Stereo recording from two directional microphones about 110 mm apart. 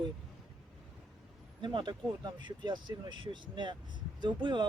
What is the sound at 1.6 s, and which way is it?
Speech, 45° right (ahead or behind).